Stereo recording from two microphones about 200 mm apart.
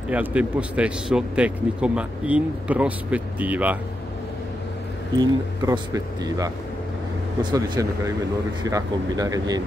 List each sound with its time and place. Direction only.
0.1 s speech: 5° right (ahead or behind)
5.1 s speech: 20° right (ahead or behind)
7.5 s speech: 20° right (ahead or behind)